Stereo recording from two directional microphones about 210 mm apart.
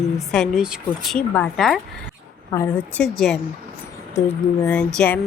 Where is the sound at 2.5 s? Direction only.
15° left (ahead or behind).